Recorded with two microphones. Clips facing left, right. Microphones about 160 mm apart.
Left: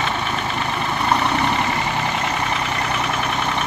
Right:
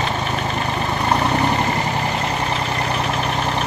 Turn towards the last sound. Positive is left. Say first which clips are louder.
# right 1 dB
turn(degrees=-35)  # may be behind; listen again after turning